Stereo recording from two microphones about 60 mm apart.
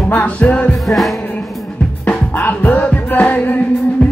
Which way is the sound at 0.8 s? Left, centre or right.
Centre.